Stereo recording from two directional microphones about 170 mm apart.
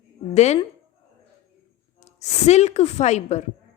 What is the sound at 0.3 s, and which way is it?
Speech, 40° left (ahead or behind).